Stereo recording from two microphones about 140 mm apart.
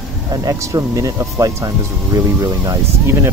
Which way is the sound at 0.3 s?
25° right (ahead or behind).